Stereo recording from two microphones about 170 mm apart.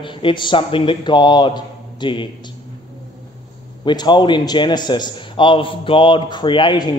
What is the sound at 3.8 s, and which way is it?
Speech, 25° left (ahead or behind).